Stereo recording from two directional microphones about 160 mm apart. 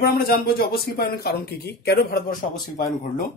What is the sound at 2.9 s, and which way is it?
Speech, 55° left (ahead or behind).